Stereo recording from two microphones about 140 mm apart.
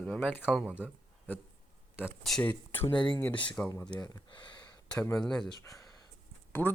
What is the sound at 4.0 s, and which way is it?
Speech, 30° left (ahead or behind).